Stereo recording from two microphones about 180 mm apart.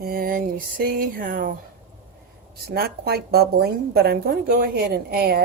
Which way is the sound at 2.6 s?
60° right (ahead or behind).